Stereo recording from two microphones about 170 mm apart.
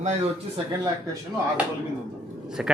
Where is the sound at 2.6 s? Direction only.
5° right (ahead or behind).